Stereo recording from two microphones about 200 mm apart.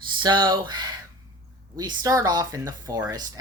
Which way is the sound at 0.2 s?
20° right (ahead or behind).